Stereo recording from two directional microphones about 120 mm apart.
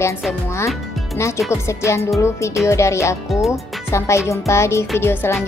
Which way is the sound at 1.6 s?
25° left (ahead or behind).